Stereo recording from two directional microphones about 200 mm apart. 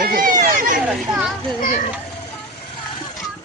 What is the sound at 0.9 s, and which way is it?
Speech, centre (ahead or behind).